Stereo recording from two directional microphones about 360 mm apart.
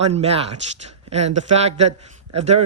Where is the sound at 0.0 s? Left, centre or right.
Centre.